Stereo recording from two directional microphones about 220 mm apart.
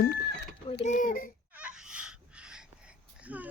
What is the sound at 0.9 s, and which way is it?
Speech, 35° left (ahead or behind).